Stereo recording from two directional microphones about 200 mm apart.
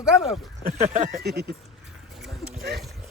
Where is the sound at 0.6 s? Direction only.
25° left (ahead or behind).